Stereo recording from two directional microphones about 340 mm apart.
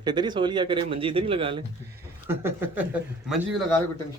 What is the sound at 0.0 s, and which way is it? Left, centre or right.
A man's voice, centre.